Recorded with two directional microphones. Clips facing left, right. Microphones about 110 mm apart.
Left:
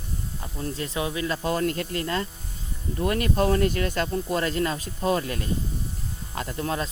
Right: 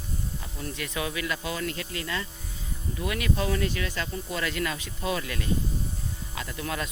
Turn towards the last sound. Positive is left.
turn(degrees=35)  # may be behind; listen again after turning